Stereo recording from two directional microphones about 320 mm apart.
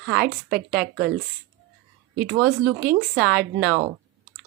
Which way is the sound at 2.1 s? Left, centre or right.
Right.